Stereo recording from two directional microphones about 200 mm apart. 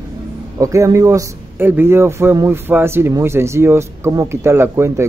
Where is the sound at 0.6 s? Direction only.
15° right (ahead or behind).